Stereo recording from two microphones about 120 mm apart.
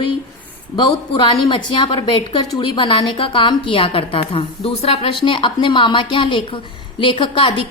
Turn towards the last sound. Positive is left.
turn(degrees=45)  # may be behind; listen again after turning